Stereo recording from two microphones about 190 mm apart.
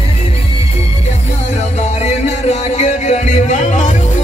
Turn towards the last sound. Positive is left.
turn(degrees=40)  # may be behind; listen again after turning